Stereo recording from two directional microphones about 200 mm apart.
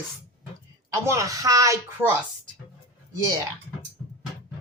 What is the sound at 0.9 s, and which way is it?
A woman's voice, 15° right (ahead or behind).